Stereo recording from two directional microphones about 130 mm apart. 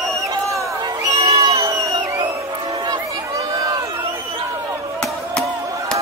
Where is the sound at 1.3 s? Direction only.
50° right (ahead or behind).